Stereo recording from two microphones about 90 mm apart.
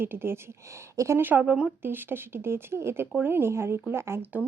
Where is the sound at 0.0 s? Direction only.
25° right (ahead or behind).